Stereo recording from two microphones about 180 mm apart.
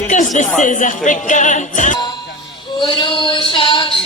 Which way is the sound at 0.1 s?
45° left (ahead or behind).